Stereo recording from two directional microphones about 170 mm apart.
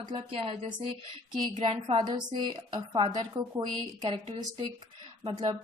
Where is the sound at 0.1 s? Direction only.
30° right (ahead or behind).